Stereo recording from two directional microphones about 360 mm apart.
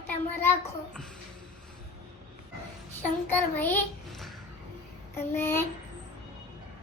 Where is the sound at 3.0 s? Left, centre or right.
Centre.